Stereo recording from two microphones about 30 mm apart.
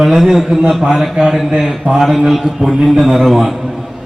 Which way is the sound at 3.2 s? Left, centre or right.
Centre.